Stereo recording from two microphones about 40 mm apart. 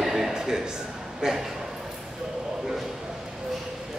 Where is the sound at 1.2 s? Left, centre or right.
Centre.